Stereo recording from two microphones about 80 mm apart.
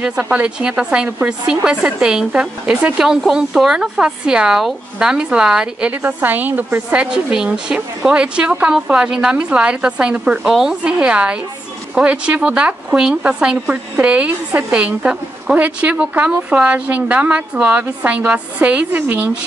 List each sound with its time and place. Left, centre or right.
0.0 s speech: centre
3.0 s speech: centre
6.0 s speech: right